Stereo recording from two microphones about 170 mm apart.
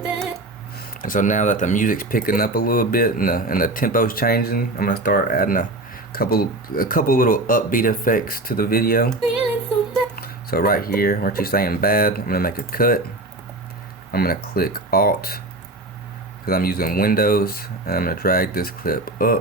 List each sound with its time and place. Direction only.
0.0 s a sound: 5° right (ahead or behind)
1.0 s speech: 50° left (ahead or behind)
10.2 s speech: 65° left (ahead or behind)
14.1 s speech: 60° left (ahead or behind)
16.5 s speech: 60° left (ahead or behind)